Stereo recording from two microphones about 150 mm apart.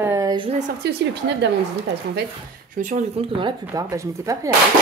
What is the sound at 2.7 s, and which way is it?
Speech, 60° right (ahead or behind).